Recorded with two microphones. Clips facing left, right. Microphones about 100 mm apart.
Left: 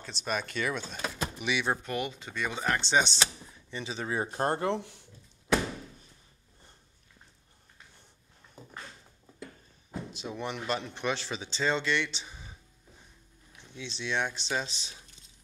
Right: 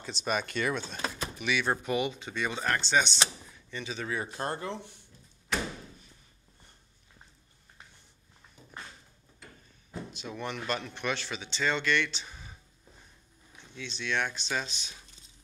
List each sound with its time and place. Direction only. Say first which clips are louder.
0.0 s speech: right 2 dB; centre (ahead or behind)
1.4 s speech: right 1 dB; 20° left (ahead or behind)
1.8 s speech: right 4 dB; 5° right (ahead or behind)
2.8 s speech: left 1 dB; 25° left (ahead or behind)
4.3 s speech: left 5 dB; 45° left (ahead or behind)
4.6 s speech: left 7 dB; 90° left
8.6 s a sound: left 7 dB; 40° left (ahead or behind)
9.8 s speech: left 2 dB; 25° left (ahead or behind)
13.7 s speech: even; 25° left (ahead or behind)